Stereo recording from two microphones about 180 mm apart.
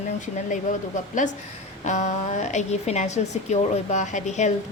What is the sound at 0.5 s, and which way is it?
A woman's voice, 45° left (ahead or behind).